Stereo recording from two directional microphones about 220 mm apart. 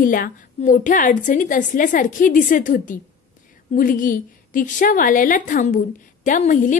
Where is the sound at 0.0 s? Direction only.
40° left (ahead or behind).